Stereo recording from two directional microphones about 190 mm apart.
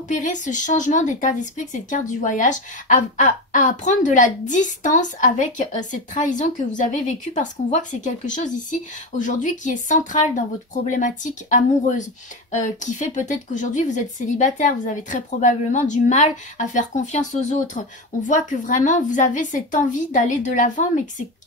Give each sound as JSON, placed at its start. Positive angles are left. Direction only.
{"t": 0.1, "sound": "a woman's voice", "side_deg": 40}
{"t": 18.2, "sound": "a woman's voice", "side_deg": 45}